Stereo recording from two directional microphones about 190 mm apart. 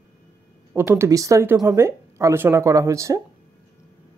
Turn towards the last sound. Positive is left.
turn(degrees=-15)  # may be behind; listen again after turning